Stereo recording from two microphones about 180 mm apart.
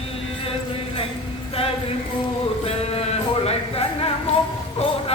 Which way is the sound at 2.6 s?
35° left (ahead or behind).